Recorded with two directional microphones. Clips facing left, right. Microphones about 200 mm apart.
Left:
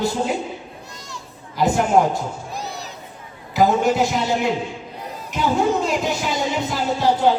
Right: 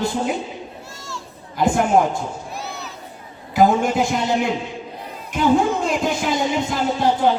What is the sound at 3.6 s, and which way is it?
A man's voice, 50° right (ahead or behind).